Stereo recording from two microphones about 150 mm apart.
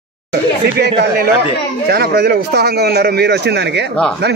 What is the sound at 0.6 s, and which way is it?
Speech, 90° right.